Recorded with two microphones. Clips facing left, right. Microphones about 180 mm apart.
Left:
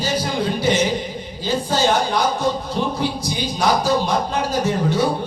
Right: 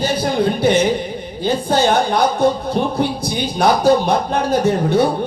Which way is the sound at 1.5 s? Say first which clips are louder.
Right 3 dB; 60° right (ahead or behind).